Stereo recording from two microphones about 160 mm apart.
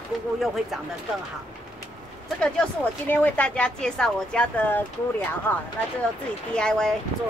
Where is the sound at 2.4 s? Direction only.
10° left (ahead or behind).